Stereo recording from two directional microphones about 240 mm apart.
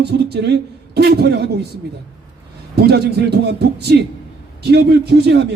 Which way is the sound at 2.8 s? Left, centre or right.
Right.